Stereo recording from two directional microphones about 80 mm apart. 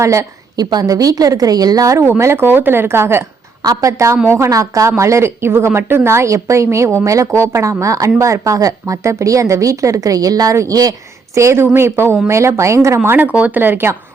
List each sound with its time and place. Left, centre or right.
0.0 s a woman's voice: right
0.5 s a woman's voice: right
2.0 s a woman's voice: right
3.6 s a woman's voice: right
11.3 s a woman's voice: right
13.0 s speech: right